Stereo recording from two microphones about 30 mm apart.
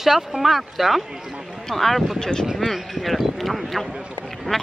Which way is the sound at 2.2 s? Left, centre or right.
Left.